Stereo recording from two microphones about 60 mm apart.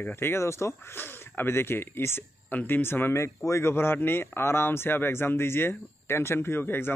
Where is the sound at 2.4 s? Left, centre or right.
Left.